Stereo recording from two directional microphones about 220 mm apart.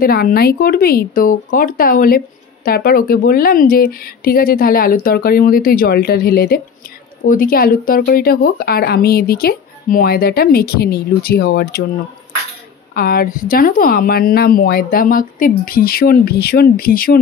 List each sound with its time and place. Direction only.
0.0 s speech: 45° left (ahead or behind)
12.9 s speech: 40° left (ahead or behind)